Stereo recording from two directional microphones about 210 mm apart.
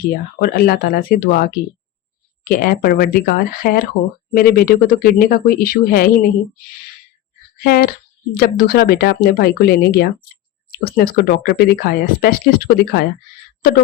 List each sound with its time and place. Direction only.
0.1 s speech: 45° left (ahead or behind)
7.6 s speech: 45° left (ahead or behind)